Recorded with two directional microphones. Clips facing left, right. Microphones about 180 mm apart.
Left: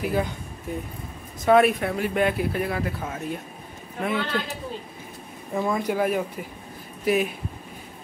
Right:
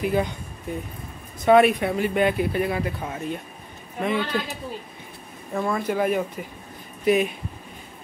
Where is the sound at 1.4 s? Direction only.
Centre (ahead or behind).